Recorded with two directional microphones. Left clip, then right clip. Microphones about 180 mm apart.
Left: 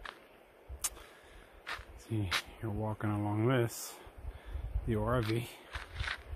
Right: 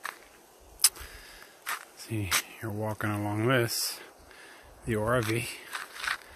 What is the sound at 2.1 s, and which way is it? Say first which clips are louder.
Speech: right 5 dB; 5° right (ahead or behind).